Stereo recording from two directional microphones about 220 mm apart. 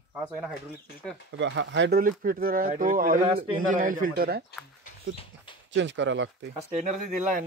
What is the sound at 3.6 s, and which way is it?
Speech, 40° right (ahead or behind).